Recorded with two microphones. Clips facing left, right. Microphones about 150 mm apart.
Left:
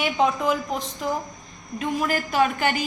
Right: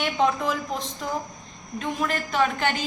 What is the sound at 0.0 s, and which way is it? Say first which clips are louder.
A woman's voice: left 1 dB; 5° left (ahead or behind).